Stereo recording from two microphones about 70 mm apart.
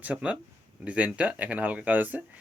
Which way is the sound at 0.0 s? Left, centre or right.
Right.